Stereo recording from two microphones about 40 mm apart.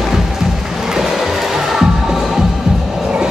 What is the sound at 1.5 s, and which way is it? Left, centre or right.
Music, centre.